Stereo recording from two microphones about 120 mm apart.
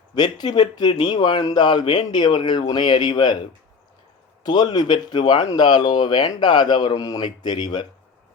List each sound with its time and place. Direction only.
0.2 s speech: 35° left (ahead or behind)
4.4 s speech: 35° left (ahead or behind)